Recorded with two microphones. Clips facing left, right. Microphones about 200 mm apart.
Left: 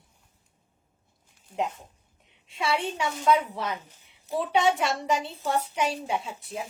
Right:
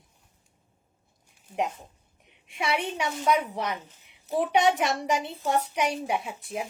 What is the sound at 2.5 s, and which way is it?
A woman's voice, 15° right (ahead or behind).